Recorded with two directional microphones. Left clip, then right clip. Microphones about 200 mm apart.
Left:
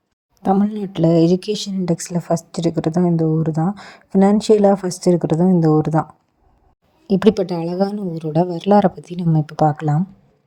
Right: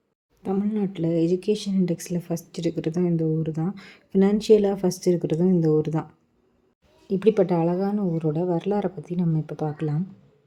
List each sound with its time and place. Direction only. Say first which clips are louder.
0.4 s speech: left 8 dB; 35° left (ahead or behind)
7.1 s speech: left 4 dB; 40° left (ahead or behind)